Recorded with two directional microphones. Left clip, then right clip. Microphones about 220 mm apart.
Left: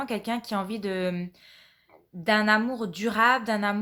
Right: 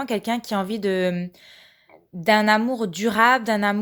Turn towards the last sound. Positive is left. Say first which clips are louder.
# right 5 dB
turn(degrees=-35)  # may be behind; listen again after turning